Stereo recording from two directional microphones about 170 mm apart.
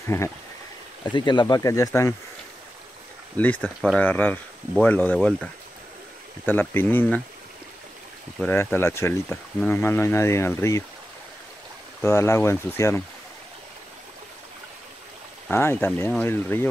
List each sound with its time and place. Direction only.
1.1 s speech: 25° left (ahead or behind)
3.3 s speech: 10° left (ahead or behind)
8.4 s speech: 5° left (ahead or behind)
12.0 s speech: 15° left (ahead or behind)
15.5 s speech: 15° left (ahead or behind)